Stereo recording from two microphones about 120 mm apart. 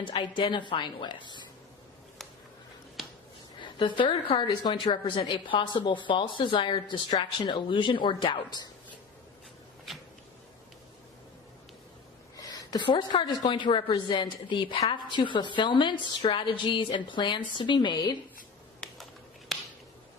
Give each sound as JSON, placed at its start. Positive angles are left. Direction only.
{"t": 0.0, "sound": "a woman's voice", "side_deg": 40}
{"t": 3.6, "sound": "a woman's voice", "side_deg": 40}
{"t": 12.4, "sound": "a woman's voice", "side_deg": 30}